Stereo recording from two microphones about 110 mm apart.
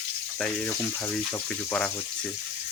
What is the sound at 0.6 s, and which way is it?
Speech, 20° left (ahead or behind).